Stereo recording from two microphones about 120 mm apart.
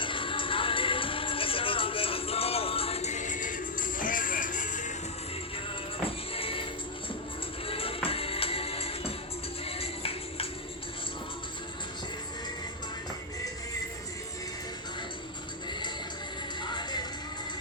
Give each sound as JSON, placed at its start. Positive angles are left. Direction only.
{"t": 0.0, "sound": "music", "side_deg": 45}
{"t": 6.1, "sound": "music", "side_deg": 50}
{"t": 7.7, "sound": "music", "side_deg": 50}
{"t": 16.6, "sound": "music", "side_deg": 35}